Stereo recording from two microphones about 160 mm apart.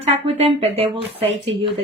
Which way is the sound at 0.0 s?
35° right (ahead or behind).